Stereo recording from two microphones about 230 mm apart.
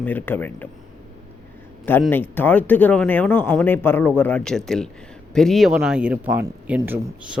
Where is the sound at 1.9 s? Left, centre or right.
Centre.